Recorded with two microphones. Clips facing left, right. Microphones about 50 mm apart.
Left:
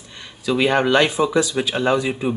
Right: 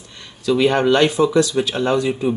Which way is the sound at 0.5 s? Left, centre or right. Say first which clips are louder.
Right 2 dB; centre.